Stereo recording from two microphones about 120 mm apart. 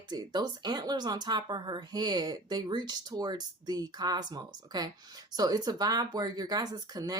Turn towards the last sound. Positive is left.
turn(degrees=-35)  # may be behind; listen again after turning